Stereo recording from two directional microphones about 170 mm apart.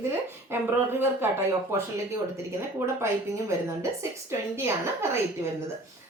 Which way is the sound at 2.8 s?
15° right (ahead or behind).